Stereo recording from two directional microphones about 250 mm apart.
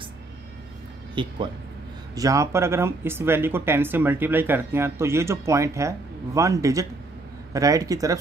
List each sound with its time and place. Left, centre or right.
1.2 s speech: centre